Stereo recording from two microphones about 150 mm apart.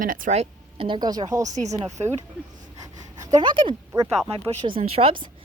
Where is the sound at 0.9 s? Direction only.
25° right (ahead or behind).